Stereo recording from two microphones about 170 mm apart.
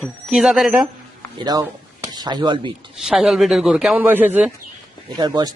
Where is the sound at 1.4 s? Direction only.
20° right (ahead or behind).